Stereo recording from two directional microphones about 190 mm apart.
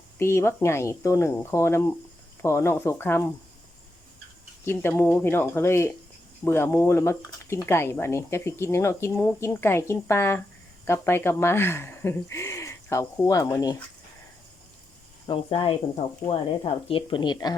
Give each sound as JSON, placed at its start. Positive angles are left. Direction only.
{"t": 0.2, "sound": "speech", "side_deg": 15}
{"t": 4.6, "sound": "speech", "side_deg": 10}
{"t": 15.3, "sound": "speech", "side_deg": 30}